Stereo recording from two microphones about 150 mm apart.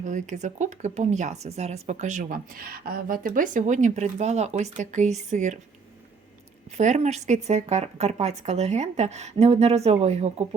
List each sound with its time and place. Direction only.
0.0 s speech: 55° right (ahead or behind)
6.7 s speech: 50° right (ahead or behind)